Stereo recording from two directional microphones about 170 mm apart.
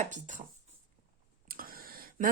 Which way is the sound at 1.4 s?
60° right (ahead or behind).